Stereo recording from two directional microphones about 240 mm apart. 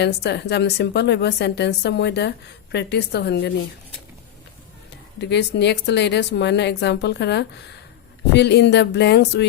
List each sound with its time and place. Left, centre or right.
0.0 s a woman's voice: left
5.3 s a woman's voice: left